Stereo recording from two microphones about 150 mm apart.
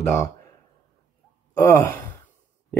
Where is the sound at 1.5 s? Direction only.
20° left (ahead or behind).